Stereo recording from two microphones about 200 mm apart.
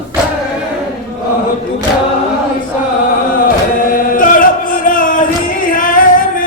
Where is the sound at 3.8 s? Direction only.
45° left (ahead or behind).